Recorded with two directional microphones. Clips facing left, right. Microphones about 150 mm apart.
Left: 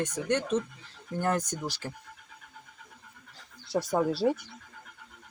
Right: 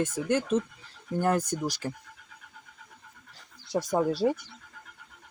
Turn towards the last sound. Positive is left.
turn(degrees=-10)  # may be behind; listen again after turning